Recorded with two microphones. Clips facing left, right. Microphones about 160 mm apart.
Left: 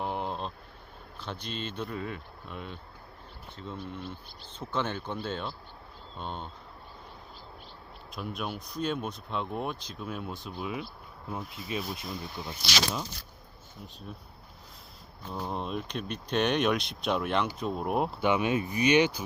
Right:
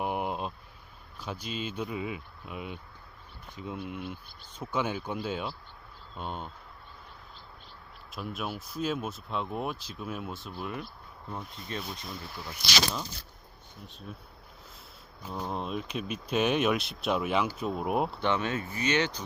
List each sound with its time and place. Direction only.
0.0 s a sound: 10° right (ahead or behind)
1.2 s speech: 10° right (ahead or behind)
8.1 s speech: centre (ahead or behind)
12.4 s speech: 20° left (ahead or behind)
14.1 s speech: centre (ahead or behind)